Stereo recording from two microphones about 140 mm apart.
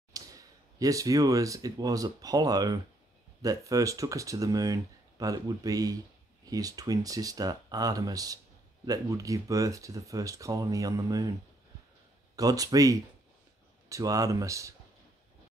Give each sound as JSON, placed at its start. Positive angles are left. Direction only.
{"t": 0.1, "sound": "speech", "side_deg": -25}
{"t": 12.4, "sound": "speech", "side_deg": -25}